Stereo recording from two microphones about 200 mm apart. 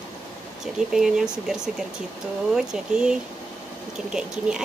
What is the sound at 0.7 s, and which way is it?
Speech, 5° right (ahead or behind).